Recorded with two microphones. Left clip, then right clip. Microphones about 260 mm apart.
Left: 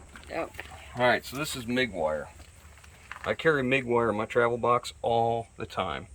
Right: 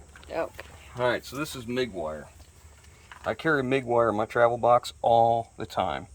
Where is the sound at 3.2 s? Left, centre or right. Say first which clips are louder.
Even; centre.